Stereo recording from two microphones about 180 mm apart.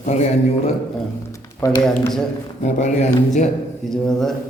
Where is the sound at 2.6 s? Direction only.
40° left (ahead or behind).